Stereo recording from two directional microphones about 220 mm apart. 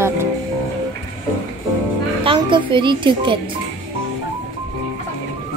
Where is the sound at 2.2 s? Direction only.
20° right (ahead or behind).